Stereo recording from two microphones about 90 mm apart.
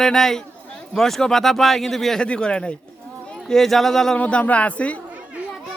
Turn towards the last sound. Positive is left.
turn(degrees=15)  # may be behind; listen again after turning